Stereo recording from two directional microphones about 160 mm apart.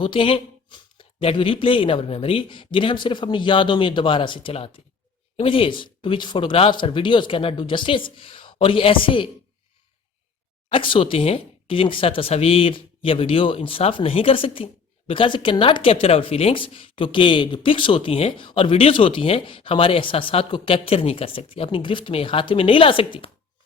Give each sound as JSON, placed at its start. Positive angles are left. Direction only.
{"t": 0.0, "sound": "speech", "side_deg": 35}
{"t": 10.7, "sound": "speech", "side_deg": 35}